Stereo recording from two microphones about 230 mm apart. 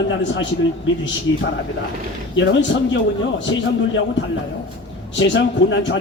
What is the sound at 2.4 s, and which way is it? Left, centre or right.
Speech, left.